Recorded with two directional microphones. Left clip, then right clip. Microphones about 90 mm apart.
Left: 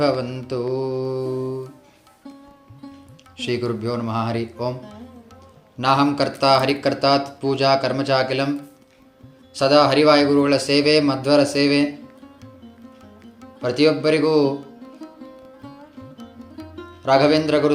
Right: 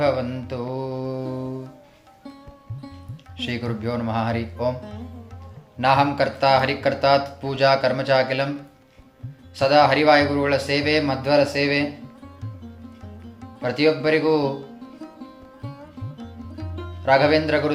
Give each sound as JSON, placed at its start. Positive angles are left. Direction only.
{"t": 0.0, "sound": "mantra", "side_deg": 35}
{"t": 3.3, "sound": "speech", "side_deg": 25}
{"t": 5.8, "sound": "speech", "side_deg": 30}
{"t": 7.4, "sound": "speech", "side_deg": 20}
{"t": 9.6, "sound": "speech", "side_deg": 40}
{"t": 13.6, "sound": "speech", "side_deg": 35}
{"t": 15.6, "sound": "music", "side_deg": 0}
{"t": 17.1, "sound": "speech", "side_deg": 30}